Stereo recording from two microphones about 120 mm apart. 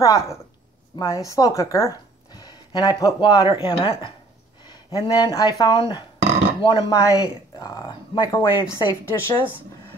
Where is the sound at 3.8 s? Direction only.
50° left (ahead or behind).